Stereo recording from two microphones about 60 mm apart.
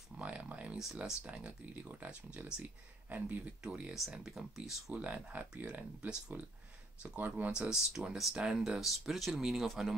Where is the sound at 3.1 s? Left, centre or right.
Right.